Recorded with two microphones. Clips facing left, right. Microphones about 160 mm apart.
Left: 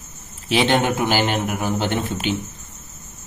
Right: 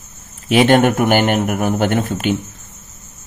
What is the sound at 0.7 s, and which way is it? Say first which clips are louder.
Speech: right 7 dB; 55° right (ahead or behind).